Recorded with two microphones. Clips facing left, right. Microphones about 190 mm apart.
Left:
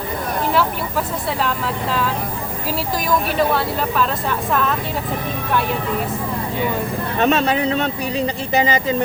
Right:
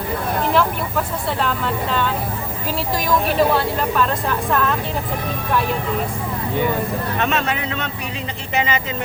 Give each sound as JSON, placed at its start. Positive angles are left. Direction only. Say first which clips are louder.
{"t": 0.5, "sound": "speech", "louder": "even", "side_deg": 0}
{"t": 3.2, "sound": "speech", "louder": "right 1 dB", "side_deg": 0}
{"t": 7.2, "sound": "speech", "louder": "left 7 dB", "side_deg": 35}